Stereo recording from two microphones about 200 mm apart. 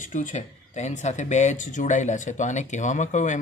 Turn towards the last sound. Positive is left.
turn(degrees=35)  # may be behind; listen again after turning